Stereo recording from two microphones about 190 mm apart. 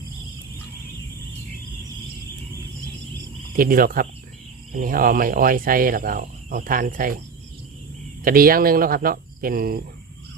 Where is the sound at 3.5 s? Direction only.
50° right (ahead or behind).